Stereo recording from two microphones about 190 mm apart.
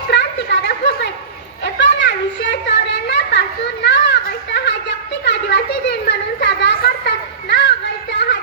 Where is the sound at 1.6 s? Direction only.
65° left (ahead or behind).